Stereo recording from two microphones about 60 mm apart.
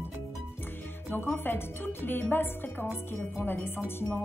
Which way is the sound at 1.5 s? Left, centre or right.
Left.